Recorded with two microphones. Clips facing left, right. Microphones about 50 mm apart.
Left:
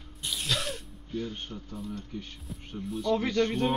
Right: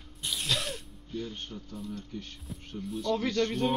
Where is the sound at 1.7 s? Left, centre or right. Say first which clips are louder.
Left 1 dB; centre.